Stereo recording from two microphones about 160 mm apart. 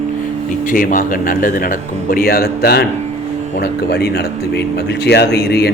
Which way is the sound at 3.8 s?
90° left.